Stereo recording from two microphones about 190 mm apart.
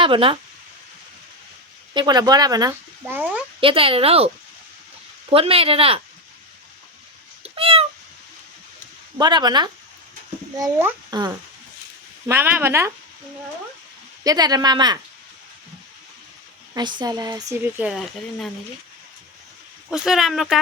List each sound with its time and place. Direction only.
0.0 s speech: 25° right (ahead or behind)
1.9 s speech: 25° right (ahead or behind)
3.6 s speech: 30° right (ahead or behind)
5.3 s speech: 30° right (ahead or behind)
7.4 s cat: 30° right (ahead or behind)
9.1 s speech: 20° right (ahead or behind)
14.3 s speech: 20° right (ahead or behind)
16.7 s speech: 25° right (ahead or behind); by 18.5 s centre (ahead or behind)
19.9 s speech: centre (ahead or behind)